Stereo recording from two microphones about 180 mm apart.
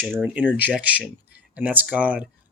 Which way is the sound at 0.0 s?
10° right (ahead or behind).